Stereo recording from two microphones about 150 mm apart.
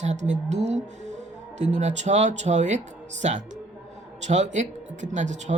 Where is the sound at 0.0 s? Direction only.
50° right (ahead or behind).